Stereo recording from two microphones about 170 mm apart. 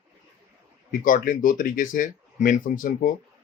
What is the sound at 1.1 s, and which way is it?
Speech, 50° left (ahead or behind).